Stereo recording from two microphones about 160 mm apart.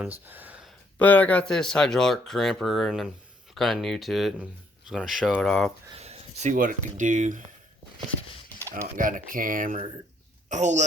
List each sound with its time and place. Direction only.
0.0 s a sound: 10° right (ahead or behind)
0.9 s speech: 10° left (ahead or behind)
5.9 s speech: 40° right (ahead or behind)
9.0 s speech: 60° right (ahead or behind)